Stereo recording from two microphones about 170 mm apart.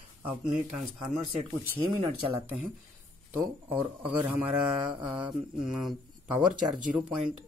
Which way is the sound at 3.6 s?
10° right (ahead or behind).